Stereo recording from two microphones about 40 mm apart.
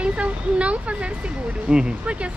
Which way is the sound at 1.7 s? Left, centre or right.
Centre.